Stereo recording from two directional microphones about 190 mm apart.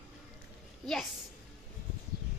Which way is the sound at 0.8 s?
Centre (ahead or behind).